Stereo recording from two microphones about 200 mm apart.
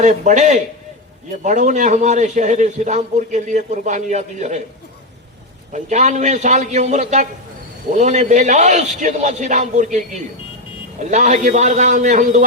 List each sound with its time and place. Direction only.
0.0 s a man's voice: 35° right (ahead or behind)
5.7 s a man's voice: 35° right (ahead or behind)
11.0 s a man's voice: 35° right (ahead or behind)